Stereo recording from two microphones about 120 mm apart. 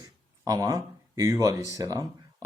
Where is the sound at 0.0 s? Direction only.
30° right (ahead or behind).